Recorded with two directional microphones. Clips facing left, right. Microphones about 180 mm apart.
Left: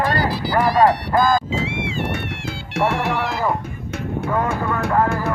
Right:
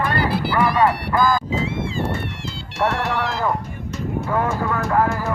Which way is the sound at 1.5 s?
75° left (ahead or behind).